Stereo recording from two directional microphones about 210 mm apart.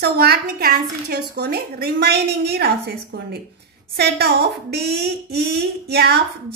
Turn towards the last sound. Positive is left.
turn(degrees=-50)  # may be behind; listen again after turning